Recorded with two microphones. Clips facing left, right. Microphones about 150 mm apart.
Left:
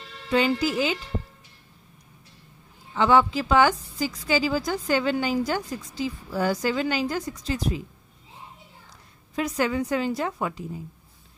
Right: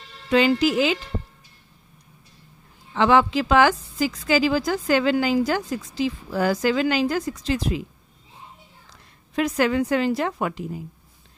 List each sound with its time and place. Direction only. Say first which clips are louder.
0.3 s a woman's voice: right 4 dB; 90° right
2.9 s a woman's voice: right 2 dB; 80° right
9.3 s a woman's voice: right 4 dB; 75° right (ahead or behind)